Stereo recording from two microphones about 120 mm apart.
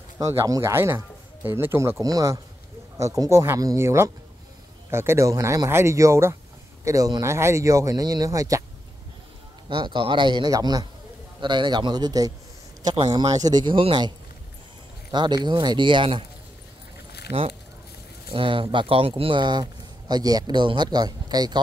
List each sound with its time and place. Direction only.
0.2 s a man's voice: 25° right (ahead or behind)
9.7 s speech: 40° right (ahead or behind)
18.3 s speech: 50° right (ahead or behind)